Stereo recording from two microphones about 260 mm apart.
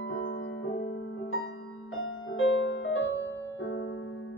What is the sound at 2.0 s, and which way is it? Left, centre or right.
Music, left.